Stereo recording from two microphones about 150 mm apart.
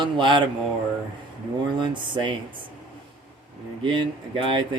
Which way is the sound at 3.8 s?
35° right (ahead or behind).